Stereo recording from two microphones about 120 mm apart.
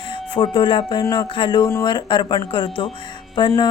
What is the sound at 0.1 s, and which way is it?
Speech, 45° left (ahead or behind).